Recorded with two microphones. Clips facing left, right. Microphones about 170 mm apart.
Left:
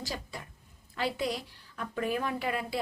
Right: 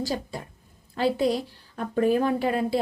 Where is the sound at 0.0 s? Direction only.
35° right (ahead or behind).